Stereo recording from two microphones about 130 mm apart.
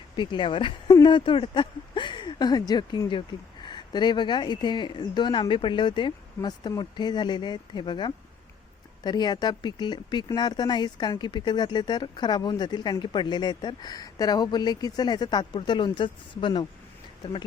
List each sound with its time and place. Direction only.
0.2 s speech: 35° left (ahead or behind)